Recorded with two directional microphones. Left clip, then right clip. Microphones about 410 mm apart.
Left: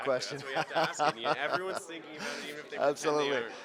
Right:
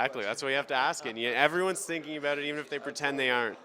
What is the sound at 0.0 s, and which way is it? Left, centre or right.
Speech, right.